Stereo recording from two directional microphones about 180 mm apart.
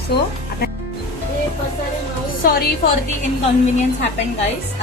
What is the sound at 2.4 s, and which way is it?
Speech, 55° left (ahead or behind).